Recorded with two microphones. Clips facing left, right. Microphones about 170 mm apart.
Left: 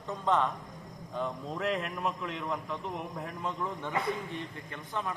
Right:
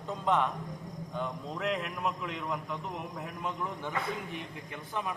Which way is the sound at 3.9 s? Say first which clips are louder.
Left 4 dB; 25° left (ahead or behind).